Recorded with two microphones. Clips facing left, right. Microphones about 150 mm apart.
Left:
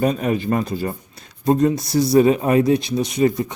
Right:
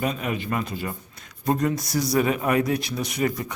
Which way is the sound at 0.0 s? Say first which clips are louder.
Left 7 dB; 40° left (ahead or behind).